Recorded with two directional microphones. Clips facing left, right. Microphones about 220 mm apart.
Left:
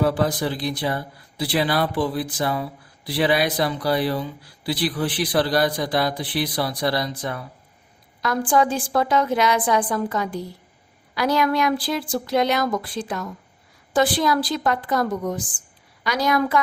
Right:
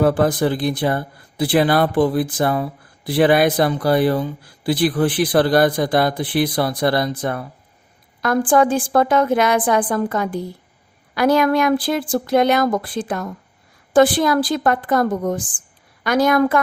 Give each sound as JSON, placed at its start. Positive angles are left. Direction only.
{"t": 0.0, "sound": "speech", "side_deg": -50}